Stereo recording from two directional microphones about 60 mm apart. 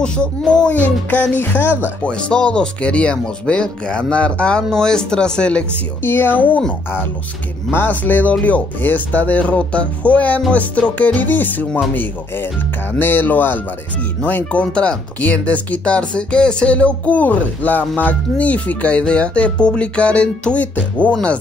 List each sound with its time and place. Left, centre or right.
0.5 s speech: centre; by 1.8 s left
2.0 s speech: centre
6.0 s speech: left
7.7 s speech: left